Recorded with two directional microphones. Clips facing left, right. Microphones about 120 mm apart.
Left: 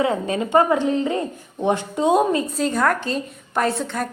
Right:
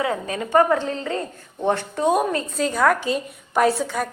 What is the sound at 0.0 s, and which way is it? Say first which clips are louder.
A woman's voice: left 4 dB; 25° left (ahead or behind).